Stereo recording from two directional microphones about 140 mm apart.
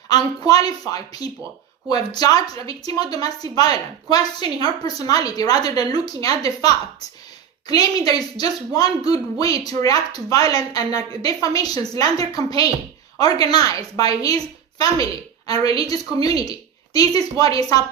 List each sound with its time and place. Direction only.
0.1 s a woman's voice: 25° left (ahead or behind)